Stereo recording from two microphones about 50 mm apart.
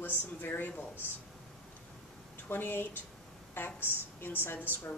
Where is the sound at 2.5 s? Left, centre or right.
Left.